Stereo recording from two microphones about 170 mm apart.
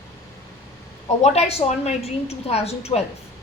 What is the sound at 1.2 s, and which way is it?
A woman's voice, 40° left (ahead or behind).